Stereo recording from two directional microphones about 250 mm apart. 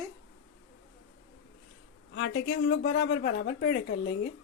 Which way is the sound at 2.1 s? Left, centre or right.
Left.